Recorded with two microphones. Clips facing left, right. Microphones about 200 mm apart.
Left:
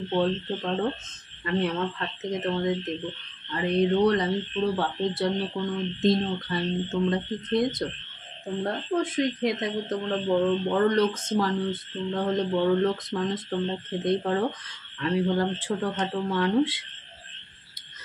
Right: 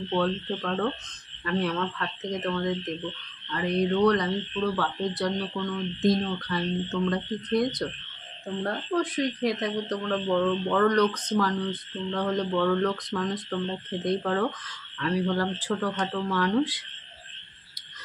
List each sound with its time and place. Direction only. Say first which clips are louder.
0.1 s speech: left 1 dB; 25° left (ahead or behind)